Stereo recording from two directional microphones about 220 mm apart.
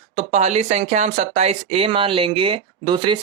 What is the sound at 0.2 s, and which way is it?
Speech, 30° right (ahead or behind).